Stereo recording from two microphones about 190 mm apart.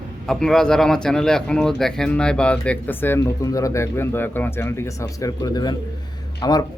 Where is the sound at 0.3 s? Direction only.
Centre (ahead or behind).